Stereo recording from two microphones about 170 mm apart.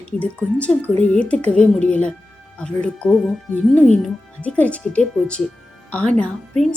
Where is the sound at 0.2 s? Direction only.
5° left (ahead or behind).